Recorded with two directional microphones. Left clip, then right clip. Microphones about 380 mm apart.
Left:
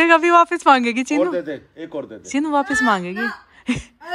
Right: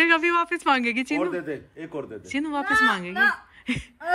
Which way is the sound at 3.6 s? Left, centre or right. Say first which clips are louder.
Left 5 dB; centre.